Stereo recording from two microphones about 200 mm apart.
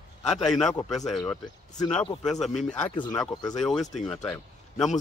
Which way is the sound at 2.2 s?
Centre (ahead or behind).